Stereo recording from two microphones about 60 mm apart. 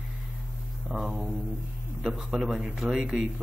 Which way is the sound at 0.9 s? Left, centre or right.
Centre.